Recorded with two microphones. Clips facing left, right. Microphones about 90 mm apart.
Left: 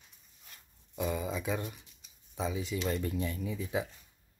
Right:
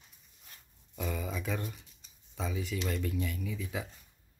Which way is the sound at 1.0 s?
10° left (ahead or behind).